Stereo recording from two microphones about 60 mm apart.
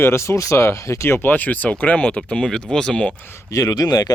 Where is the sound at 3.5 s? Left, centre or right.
Left.